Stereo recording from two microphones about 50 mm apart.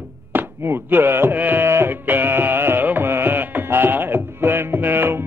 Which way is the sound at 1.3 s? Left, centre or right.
Right.